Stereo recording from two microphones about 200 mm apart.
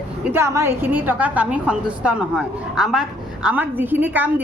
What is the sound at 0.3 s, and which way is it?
A woman's voice, 15° right (ahead or behind).